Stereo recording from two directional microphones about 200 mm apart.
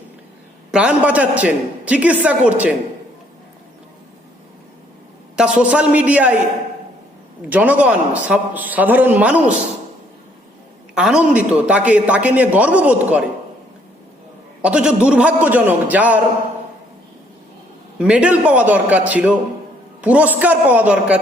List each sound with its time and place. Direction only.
0.7 s a man's voice: 5° right (ahead or behind)
5.4 s a man's voice: 5° right (ahead or behind)
7.5 s a man's voice: 5° right (ahead or behind)
10.9 s a man's voice: 5° right (ahead or behind)
14.6 s a man's voice: 5° right (ahead or behind)
18.0 s a man's voice: 5° right (ahead or behind)